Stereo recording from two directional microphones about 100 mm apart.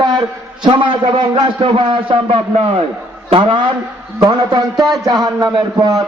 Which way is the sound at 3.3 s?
65° right (ahead or behind).